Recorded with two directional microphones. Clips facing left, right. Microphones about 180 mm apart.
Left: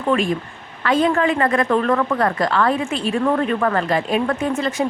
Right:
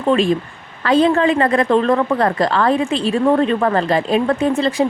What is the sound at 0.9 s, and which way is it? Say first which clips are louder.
Speech: right 4 dB; 35° right (ahead or behind).